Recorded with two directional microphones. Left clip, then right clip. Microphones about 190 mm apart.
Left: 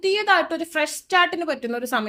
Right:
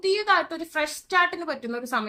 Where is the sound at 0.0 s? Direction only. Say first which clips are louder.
Left 3 dB; 45° left (ahead or behind).